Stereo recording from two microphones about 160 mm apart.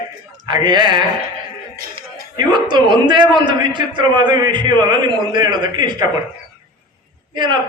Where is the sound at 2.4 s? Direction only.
30° right (ahead or behind).